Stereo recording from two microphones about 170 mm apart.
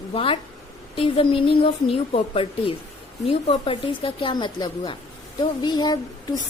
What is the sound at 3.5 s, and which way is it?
A woman's voice, 30° left (ahead or behind).